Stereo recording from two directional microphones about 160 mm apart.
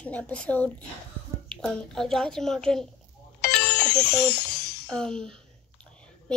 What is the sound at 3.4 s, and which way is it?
Music, 90° left.